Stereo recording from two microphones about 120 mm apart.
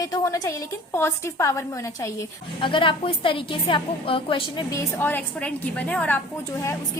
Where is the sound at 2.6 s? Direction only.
45° left (ahead or behind).